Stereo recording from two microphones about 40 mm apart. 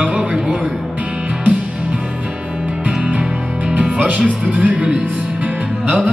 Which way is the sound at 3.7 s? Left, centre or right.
Right.